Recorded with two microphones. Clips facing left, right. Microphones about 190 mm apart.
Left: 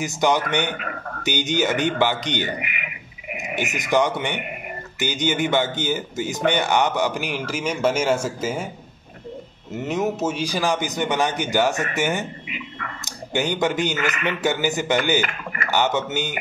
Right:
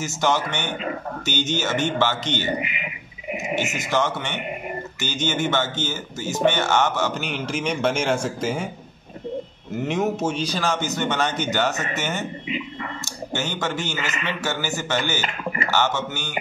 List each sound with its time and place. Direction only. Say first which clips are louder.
0.0 s speech: left 2 dB; 15° left (ahead or behind)
3.5 s speech: left 3 dB; 15° left (ahead or behind)
9.8 s speech: even; centre (ahead or behind); by 16.3 s 20° left (ahead or behind)